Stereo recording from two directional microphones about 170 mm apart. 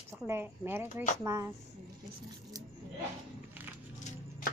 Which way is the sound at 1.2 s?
15° right (ahead or behind).